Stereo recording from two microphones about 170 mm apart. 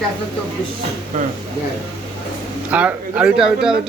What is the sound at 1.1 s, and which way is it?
Speech, 50° right (ahead or behind).